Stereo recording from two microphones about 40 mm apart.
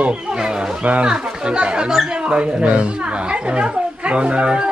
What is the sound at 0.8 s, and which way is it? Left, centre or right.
A woman's voice, right.